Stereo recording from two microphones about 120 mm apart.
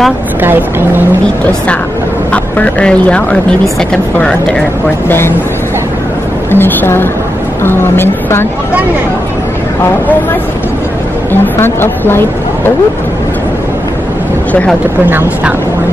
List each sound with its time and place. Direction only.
0.4 s speech: 15° right (ahead or behind)
2.3 s speech: 10° left (ahead or behind)
6.5 s a woman's voice: 15° left (ahead or behind)
11.4 s a woman's voice: 20° left (ahead or behind)
14.5 s speech: 10° left (ahead or behind)
15.0 s speech: 15° right (ahead or behind)